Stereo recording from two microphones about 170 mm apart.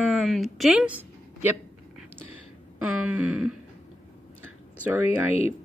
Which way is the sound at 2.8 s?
5° right (ahead or behind).